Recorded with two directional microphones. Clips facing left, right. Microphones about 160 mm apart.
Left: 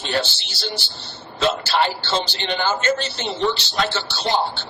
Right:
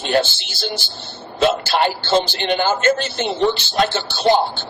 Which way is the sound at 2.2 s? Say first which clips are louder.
Right 5 dB; 50° right (ahead or behind).